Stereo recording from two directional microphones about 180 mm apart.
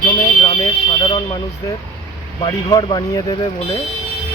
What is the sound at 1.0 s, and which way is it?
Speech, 30° left (ahead or behind).